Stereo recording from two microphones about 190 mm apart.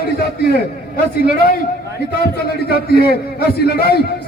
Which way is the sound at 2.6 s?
55° left (ahead or behind).